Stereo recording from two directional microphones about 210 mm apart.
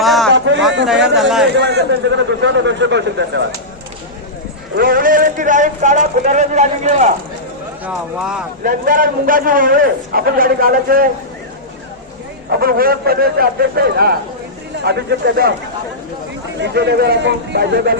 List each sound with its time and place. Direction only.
0.0 s a sound: centre (ahead or behind)
1.0 s speech: centre (ahead or behind)
1.5 s a man's voice: 55° right (ahead or behind)
4.8 s a man's voice: 40° right (ahead or behind)
7.9 s speech: 5° right (ahead or behind)
8.6 s a man's voice: 40° right (ahead or behind)
12.5 s a man's voice: 45° right (ahead or behind)
16.6 s a man's voice: 55° right (ahead or behind)